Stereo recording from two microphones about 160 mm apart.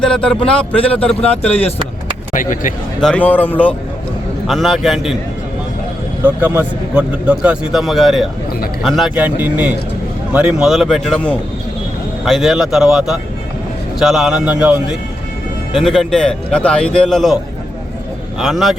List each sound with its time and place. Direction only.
0.0 s speech: 5° left (ahead or behind)
2.3 s speech: 55° left (ahead or behind)
3.0 s speech: 5° left (ahead or behind)
6.2 s a man's voice: 10° right (ahead or behind)
18.3 s speech: centre (ahead or behind)